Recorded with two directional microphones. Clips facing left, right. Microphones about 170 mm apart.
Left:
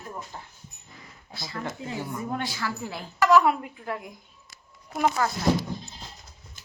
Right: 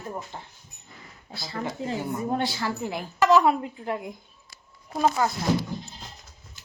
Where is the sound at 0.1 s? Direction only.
25° right (ahead or behind).